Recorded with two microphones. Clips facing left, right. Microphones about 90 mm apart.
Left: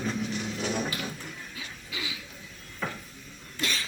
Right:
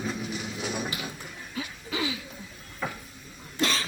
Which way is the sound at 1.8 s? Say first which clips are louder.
Right 8 dB; 35° right (ahead or behind).